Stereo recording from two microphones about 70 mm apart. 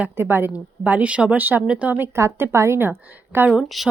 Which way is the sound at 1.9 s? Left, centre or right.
Right.